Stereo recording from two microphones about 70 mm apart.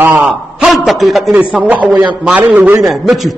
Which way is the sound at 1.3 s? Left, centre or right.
Centre.